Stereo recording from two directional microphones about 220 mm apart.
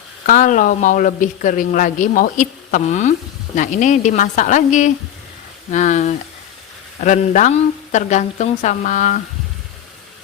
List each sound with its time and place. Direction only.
0.3 s a man's voice: 35° left (ahead or behind)